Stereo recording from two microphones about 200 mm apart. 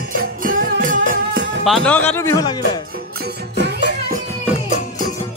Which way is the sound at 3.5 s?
60° right (ahead or behind).